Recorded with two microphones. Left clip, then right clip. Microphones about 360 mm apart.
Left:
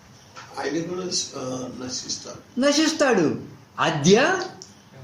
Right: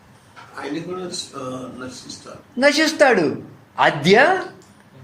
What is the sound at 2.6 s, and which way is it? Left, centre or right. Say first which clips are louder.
Speech: right 5 dB; centre.